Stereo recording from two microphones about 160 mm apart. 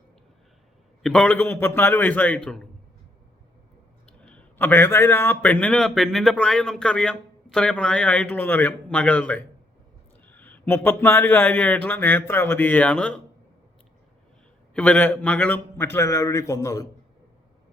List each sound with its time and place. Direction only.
1.0 s a man's voice: 5° left (ahead or behind)
4.2 s a man's voice: 5° left (ahead or behind)
14.7 s a man's voice: 10° left (ahead or behind)